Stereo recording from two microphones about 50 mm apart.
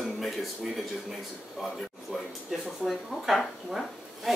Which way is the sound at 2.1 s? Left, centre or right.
Centre.